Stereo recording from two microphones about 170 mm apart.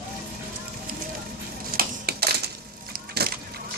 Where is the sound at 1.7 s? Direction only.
65° right (ahead or behind).